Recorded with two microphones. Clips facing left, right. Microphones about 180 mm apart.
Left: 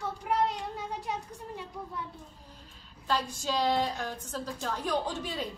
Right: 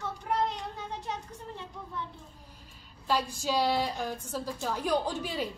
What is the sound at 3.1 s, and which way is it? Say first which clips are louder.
A woman's voice: right 2 dB; 10° right (ahead or behind).